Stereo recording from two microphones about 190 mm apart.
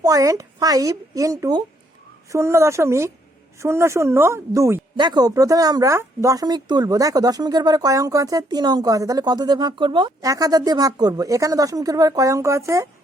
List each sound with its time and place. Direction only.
0.0 s speech: 20° right (ahead or behind)